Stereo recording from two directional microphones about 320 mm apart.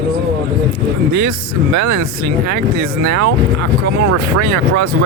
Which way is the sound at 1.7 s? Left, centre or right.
Right.